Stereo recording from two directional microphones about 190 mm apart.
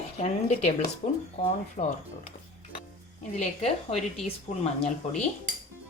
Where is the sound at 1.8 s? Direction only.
40° left (ahead or behind).